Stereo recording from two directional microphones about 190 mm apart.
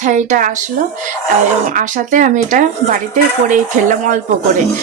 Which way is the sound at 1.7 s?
40° right (ahead or behind).